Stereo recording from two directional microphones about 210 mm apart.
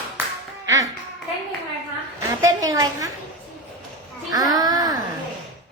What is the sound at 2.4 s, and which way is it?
Speech, 15° right (ahead or behind).